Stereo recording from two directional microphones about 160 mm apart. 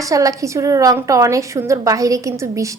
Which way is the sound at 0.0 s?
20° right (ahead or behind).